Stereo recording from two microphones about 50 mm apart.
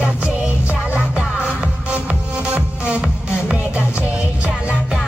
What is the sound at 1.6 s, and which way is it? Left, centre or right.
Music, right.